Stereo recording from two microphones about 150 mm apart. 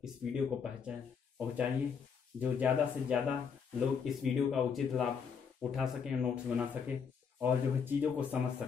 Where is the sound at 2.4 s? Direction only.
10° right (ahead or behind).